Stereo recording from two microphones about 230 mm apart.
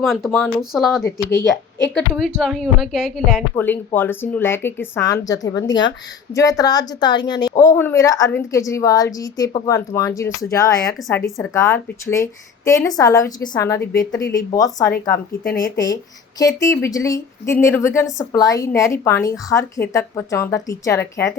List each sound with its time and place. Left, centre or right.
0.0 s a woman's voice: centre
1.3 s a woman's voice: centre
1.9 s a woman's voice: centre
3.5 s a woman's voice: centre
15.4 s speech: left
16.4 s a woman's voice: centre